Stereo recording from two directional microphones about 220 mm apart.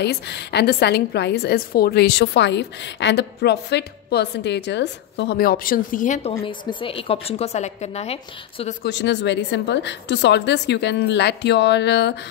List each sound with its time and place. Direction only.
0.0 s a woman's voice: 50° left (ahead or behind); by 6.3 s 35° left (ahead or behind)
6.4 s a woman's voice: 20° left (ahead or behind)
8.8 s a woman's voice: 50° left (ahead or behind)